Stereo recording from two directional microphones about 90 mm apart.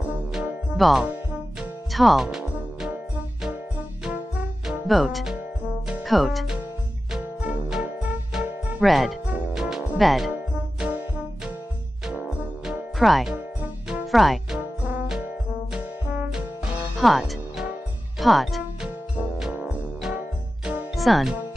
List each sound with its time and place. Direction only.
0.3 s music: 5° right (ahead or behind)
4.6 s speech: centre (ahead or behind)
7.1 s music: 15° right (ahead or behind)
8.8 s speech: centre (ahead or behind)
9.5 s music: 5° right (ahead or behind)
10.5 s music: 15° right (ahead or behind)
13.0 s speech: centre (ahead or behind)
13.3 s music: 10° right (ahead or behind)
14.1 s speech: centre (ahead or behind)
14.6 s music: 15° right (ahead or behind)
18.2 s speech: centre (ahead or behind)
19.5 s music: 15° right (ahead or behind)
20.9 s speech: centre (ahead or behind)